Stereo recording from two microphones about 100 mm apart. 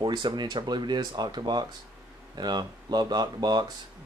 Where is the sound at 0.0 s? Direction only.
50° right (ahead or behind).